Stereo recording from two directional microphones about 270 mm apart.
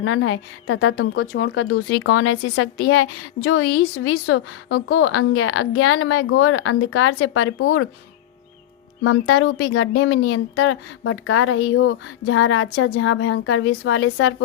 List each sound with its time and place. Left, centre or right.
0.0 s a woman's voice: left
9.0 s a woman's voice: left